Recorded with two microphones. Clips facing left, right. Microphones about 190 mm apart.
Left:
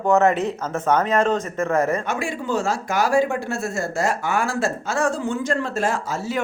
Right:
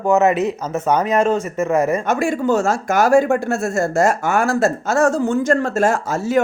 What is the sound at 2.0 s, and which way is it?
A man's voice, 45° right (ahead or behind).